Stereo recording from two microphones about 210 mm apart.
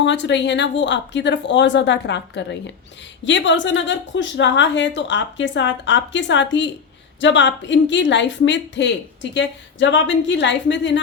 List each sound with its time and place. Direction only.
0.0 s speech: 55° left (ahead or behind)